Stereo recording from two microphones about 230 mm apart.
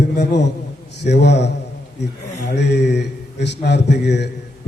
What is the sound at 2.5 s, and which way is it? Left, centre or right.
A man's voice, left.